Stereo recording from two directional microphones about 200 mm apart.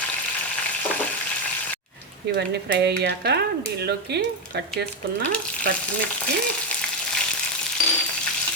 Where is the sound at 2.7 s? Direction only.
60° right (ahead or behind).